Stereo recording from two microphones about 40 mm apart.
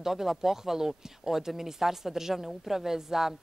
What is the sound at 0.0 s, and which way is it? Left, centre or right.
Speech, centre.